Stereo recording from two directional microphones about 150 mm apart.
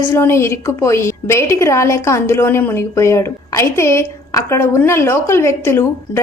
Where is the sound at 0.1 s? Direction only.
15° left (ahead or behind).